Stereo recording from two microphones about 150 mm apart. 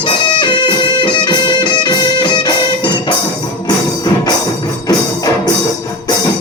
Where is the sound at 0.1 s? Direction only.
30° left (ahead or behind).